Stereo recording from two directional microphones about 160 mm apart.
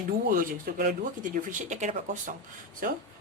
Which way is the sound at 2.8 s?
60° right (ahead or behind).